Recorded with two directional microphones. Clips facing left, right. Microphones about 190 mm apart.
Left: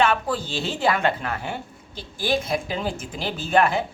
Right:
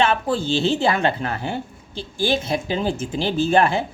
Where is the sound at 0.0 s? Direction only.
25° right (ahead or behind).